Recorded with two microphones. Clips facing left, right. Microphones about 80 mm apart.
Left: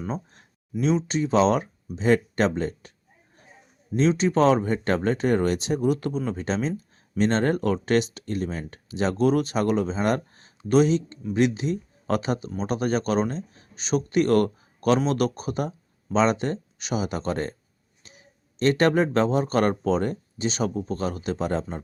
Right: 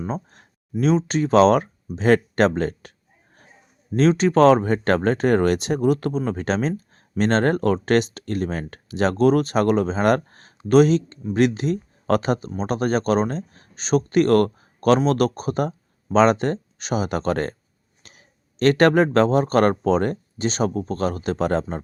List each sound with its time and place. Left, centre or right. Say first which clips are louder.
0.8 s speech: right 4 dB; right
3.9 s speech: right 4 dB; right
18.0 s a sound: right 1 dB; right
18.6 s speech: right 4 dB; right